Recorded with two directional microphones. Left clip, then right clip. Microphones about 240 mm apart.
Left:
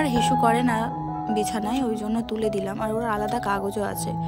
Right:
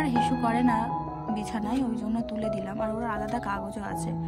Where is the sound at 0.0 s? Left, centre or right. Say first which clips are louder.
Left 5 dB; centre.